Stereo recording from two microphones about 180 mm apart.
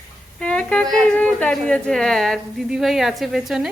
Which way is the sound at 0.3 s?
5° left (ahead or behind).